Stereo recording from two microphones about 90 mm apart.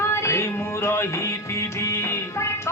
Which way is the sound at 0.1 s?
30° left (ahead or behind).